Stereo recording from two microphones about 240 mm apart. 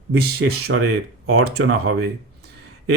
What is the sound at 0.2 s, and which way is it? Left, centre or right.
Speech, right.